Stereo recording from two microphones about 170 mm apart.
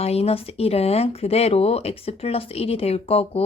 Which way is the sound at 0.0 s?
35° left (ahead or behind).